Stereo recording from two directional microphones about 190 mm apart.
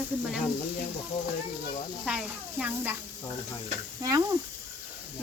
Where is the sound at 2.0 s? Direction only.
5° right (ahead or behind).